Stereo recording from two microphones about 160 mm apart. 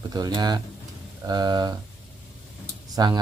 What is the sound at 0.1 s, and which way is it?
Speech, 25° right (ahead or behind).